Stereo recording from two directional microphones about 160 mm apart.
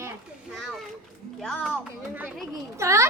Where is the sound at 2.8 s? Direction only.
20° right (ahead or behind).